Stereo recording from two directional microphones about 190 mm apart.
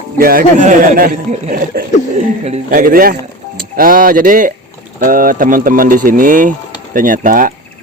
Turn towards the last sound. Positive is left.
turn(degrees=-45)  # may be behind; listen again after turning